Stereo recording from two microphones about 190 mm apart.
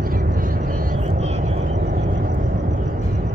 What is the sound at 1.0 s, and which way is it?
Vehicle, 35° right (ahead or behind).